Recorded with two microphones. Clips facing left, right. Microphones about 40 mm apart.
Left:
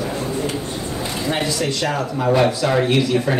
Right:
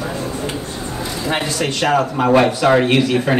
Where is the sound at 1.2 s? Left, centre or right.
Right.